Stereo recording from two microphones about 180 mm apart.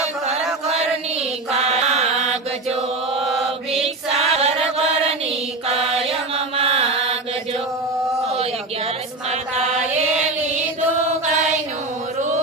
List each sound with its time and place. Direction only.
1.5 s chant: 35° right (ahead or behind)
4.1 s chant: 35° right (ahead or behind)
5.6 s mantra: 35° right (ahead or behind)